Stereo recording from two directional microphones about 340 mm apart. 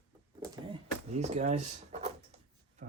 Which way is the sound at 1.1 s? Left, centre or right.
Centre.